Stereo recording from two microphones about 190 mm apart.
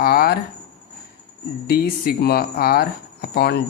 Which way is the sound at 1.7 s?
55° left (ahead or behind).